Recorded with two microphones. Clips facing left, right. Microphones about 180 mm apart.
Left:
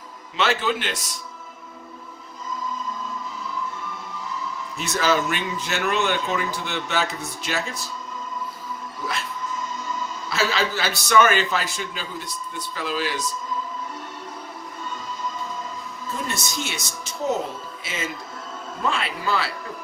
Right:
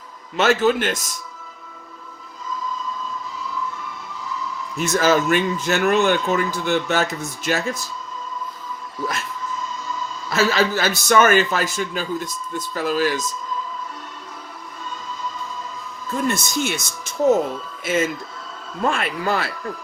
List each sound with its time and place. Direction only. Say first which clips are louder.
0.3 s a man's voice: right 6 dB; 45° right (ahead or behind)
4.8 s a man's voice: right 5 dB; 45° right (ahead or behind)
10.2 s a man's voice: right 5 dB; 45° right (ahead or behind)
16.2 s a man's voice: right 8 dB; 50° right (ahead or behind)